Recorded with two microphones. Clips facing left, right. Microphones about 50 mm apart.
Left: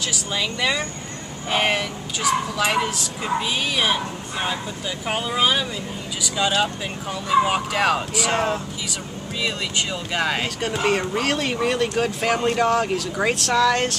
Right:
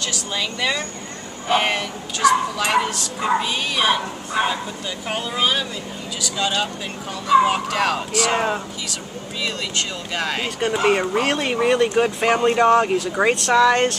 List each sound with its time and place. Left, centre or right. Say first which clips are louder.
0.0 s a woman's voice: even; centre
5.0 s speech: left 1 dB; centre
8.3 s speech: even; centre
9.4 s a woman's voice: even; centre
10.7 s speech: right 4 dB; centre